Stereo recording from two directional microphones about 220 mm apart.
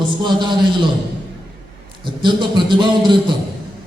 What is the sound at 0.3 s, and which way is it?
Speech, 20° right (ahead or behind).